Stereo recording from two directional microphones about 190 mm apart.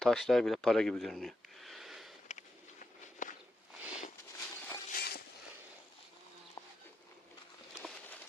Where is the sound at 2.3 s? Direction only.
40° left (ahead or behind).